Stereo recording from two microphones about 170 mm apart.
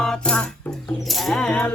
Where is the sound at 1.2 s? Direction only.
5° left (ahead or behind).